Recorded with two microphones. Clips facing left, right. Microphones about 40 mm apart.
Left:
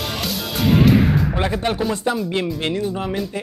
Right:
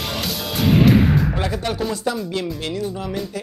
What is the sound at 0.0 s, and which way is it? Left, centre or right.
Music, centre.